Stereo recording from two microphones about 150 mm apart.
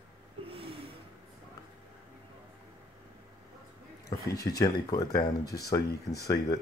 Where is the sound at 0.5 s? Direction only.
40° right (ahead or behind).